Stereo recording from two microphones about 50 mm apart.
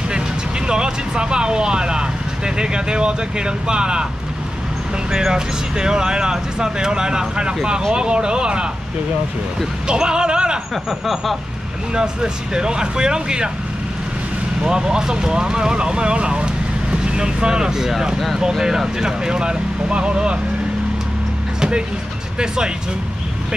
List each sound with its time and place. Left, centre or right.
0.1 s speech: centre
5.1 s speech: centre
9.8 s speech: centre
10.7 s a sound: centre
11.9 s speech: centre
14.6 s speech: centre
21.5 s music: centre